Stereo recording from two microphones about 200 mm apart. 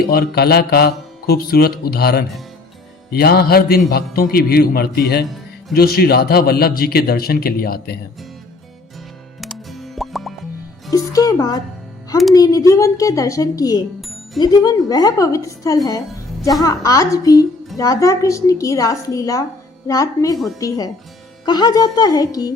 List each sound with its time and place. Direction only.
0.0 s speech: 50° left (ahead or behind)
9.4 s music: centre (ahead or behind)
10.9 s a woman's voice: 15° left (ahead or behind)
20.3 s speech: centre (ahead or behind)
20.6 s a woman's voice: 20° left (ahead or behind)